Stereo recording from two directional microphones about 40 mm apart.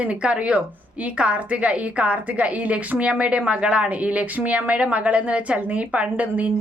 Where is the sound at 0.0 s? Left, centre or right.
Right.